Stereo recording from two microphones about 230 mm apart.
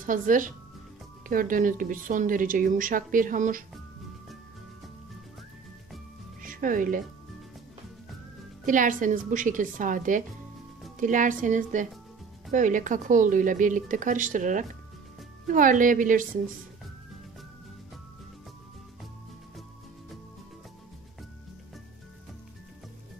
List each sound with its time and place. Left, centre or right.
0.0 s a woman's voice: right
6.4 s speech: right
8.6 s a woman's voice: right